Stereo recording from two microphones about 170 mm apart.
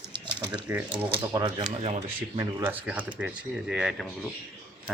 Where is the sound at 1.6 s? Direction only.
45° right (ahead or behind).